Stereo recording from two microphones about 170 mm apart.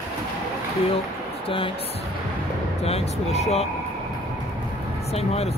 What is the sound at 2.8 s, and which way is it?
Speech, 40° left (ahead or behind).